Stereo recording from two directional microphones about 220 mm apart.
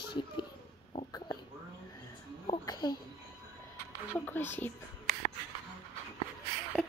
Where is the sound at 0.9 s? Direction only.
20° left (ahead or behind).